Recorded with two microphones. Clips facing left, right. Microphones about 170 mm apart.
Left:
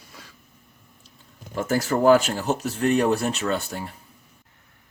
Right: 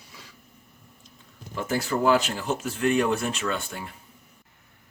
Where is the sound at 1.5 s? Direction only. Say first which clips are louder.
Left 4 dB; 40° left (ahead or behind).